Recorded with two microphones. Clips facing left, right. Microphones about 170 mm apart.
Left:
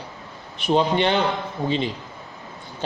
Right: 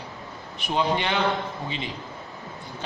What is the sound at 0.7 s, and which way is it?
Speech, 35° left (ahead or behind).